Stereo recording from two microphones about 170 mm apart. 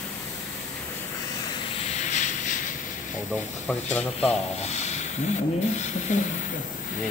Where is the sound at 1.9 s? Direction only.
45° left (ahead or behind).